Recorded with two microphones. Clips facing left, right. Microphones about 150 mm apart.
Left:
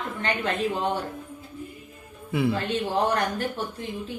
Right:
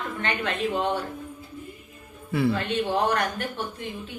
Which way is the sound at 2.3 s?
15° left (ahead or behind).